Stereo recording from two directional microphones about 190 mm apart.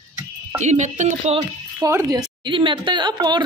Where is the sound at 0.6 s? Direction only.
40° right (ahead or behind).